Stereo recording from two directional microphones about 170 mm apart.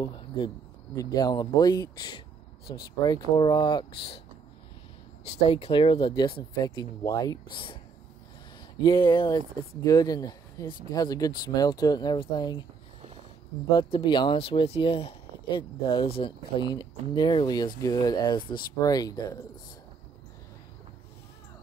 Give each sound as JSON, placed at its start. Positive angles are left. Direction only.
{"t": 0.9, "sound": "speech", "side_deg": 25}
{"t": 5.2, "sound": "speech", "side_deg": 35}
{"t": 13.7, "sound": "speech", "side_deg": 25}